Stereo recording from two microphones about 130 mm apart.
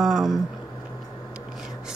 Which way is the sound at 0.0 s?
Centre (ahead or behind).